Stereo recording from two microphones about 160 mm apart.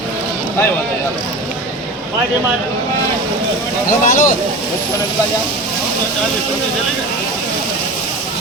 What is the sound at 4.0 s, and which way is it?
Speech, 55° left (ahead or behind).